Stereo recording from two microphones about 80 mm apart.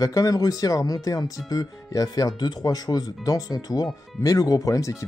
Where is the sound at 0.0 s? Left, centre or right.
Left.